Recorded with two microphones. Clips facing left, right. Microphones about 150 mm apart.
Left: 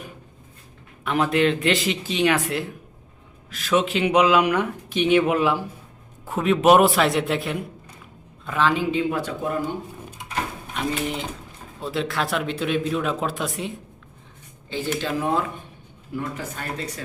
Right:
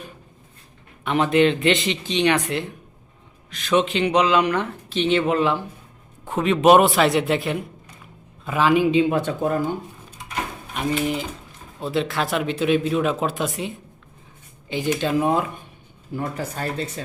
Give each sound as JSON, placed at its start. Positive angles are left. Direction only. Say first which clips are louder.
{"t": 1.0, "sound": "speech", "louder": "right 2 dB", "side_deg": 0}
{"t": 8.4, "sound": "speech", "louder": "right 4 dB", "side_deg": -10}
{"t": 9.2, "sound": "speech", "louder": "right 4 dB", "side_deg": -45}
{"t": 11.8, "sound": "speech", "louder": "right 2 dB", "side_deg": 0}
{"t": 14.7, "sound": "speech", "louder": "right 4 dB", "side_deg": -15}
{"t": 16.1, "sound": "speech", "louder": "right 2 dB", "side_deg": -35}